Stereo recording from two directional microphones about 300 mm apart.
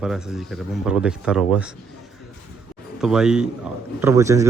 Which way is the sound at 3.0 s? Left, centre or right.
Centre.